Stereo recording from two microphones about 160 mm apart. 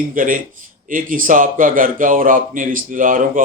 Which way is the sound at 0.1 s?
55° right (ahead or behind).